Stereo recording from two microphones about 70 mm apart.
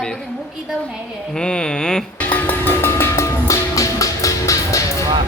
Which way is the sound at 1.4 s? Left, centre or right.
Centre.